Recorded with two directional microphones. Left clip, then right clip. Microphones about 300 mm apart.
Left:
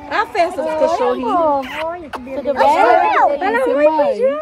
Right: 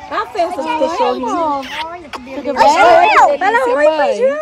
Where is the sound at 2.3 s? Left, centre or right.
Centre.